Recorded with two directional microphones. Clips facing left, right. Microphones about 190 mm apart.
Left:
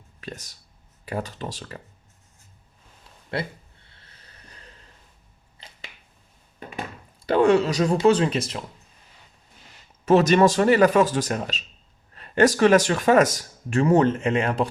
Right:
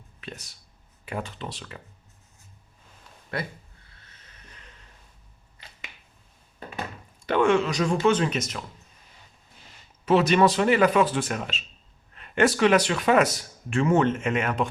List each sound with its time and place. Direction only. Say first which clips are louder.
0.2 s speech: left 3 dB; 40° left (ahead or behind)
3.9 s snort: left 3 dB; 35° left (ahead or behind)
7.3 s speech: left 3 dB; 35° left (ahead or behind)
10.1 s speech: left 3 dB; 45° left (ahead or behind)